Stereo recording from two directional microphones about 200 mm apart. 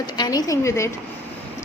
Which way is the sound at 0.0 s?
20° left (ahead or behind).